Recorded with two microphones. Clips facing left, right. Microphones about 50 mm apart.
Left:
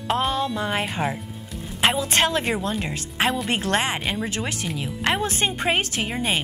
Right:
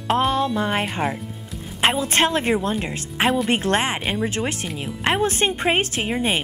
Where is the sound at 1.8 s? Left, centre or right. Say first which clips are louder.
Right 1 dB; right.